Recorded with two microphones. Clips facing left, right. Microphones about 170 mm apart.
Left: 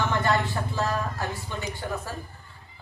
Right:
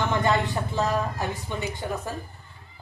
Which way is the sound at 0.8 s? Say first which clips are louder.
Right 2 dB; 20° right (ahead or behind).